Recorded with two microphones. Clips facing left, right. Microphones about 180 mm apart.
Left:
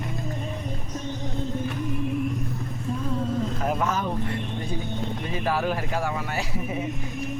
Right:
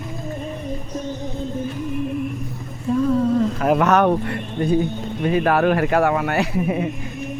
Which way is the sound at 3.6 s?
80° right.